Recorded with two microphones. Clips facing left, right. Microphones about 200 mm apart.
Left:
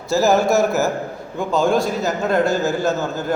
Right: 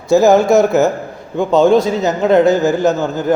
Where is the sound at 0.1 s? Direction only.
15° right (ahead or behind).